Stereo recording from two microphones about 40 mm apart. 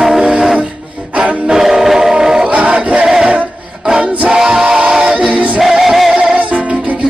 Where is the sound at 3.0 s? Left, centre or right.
Centre.